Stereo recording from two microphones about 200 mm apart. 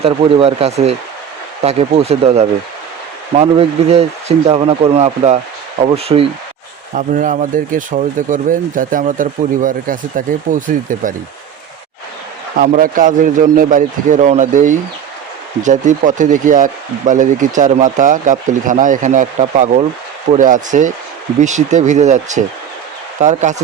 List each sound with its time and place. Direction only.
0.0 s speech: 30° right (ahead or behind)
6.9 s speech: 40° right (ahead or behind)
12.5 s speech: 40° right (ahead or behind)